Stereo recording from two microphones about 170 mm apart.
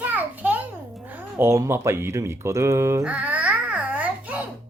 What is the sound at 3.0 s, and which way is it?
Babbling, 10° right (ahead or behind).